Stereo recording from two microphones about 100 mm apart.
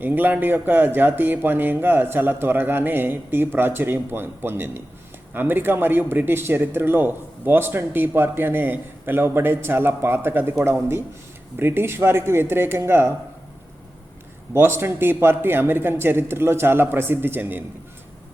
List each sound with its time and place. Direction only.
0.0 s speech: 20° right (ahead or behind)
11.5 s speech: 20° right (ahead or behind)
14.5 s speech: 25° right (ahead or behind)